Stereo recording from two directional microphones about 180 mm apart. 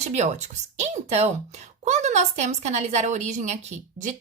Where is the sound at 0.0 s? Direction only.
40° right (ahead or behind).